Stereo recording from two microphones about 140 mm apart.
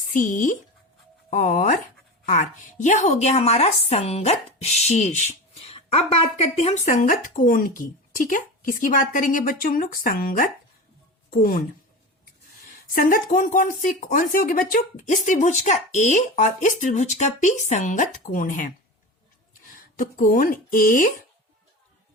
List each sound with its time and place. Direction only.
0.1 s a woman's voice: 65° left (ahead or behind); by 11.6 s 90° left
12.9 s a woman's voice: 85° left
19.7 s speech: 75° left (ahead or behind)